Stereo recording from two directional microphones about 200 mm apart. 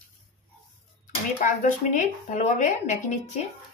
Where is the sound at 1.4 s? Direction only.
40° left (ahead or behind).